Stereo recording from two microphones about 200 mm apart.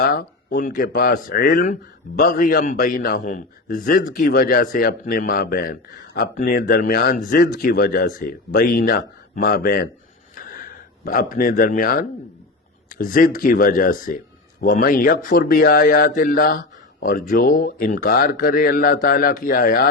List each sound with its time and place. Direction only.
0.0 s speech: 45° left (ahead or behind)
10.3 s a sound: 45° left (ahead or behind)
13.0 s speech: 45° left (ahead or behind)